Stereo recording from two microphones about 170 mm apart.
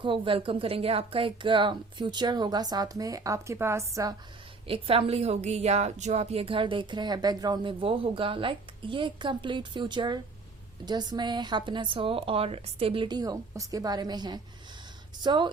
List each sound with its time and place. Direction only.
0.0 s a woman's voice: 30° right (ahead or behind)
4.6 s a woman's voice: 35° right (ahead or behind)